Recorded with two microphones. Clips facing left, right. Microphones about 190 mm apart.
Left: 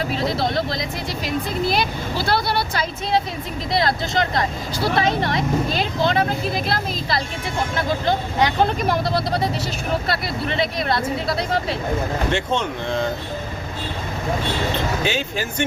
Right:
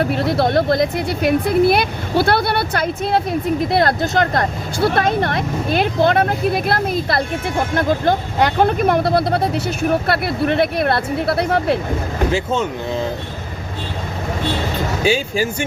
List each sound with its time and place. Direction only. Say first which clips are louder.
0.0 s speech: right 5 dB; 60° right (ahead or behind)
12.3 s speech: right 3 dB; 5° right (ahead or behind)
15.0 s speech: right 6 dB; 10° right (ahead or behind)